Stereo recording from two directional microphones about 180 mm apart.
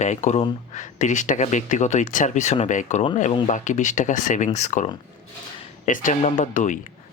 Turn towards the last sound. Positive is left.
turn(degrees=45)  # may be behind; listen again after turning